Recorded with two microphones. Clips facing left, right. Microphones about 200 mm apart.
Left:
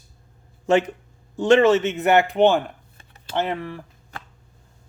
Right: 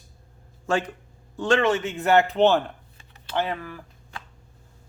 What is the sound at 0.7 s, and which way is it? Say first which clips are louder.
Speech: left 6 dB; 20° left (ahead or behind).